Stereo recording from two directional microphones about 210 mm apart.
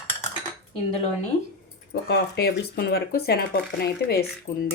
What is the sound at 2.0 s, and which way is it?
Speech, 50° left (ahead or behind).